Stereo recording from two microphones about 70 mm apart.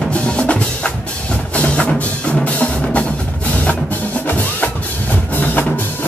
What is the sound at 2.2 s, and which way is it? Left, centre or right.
Music, centre.